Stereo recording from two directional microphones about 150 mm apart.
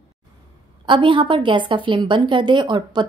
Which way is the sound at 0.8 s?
30° right (ahead or behind).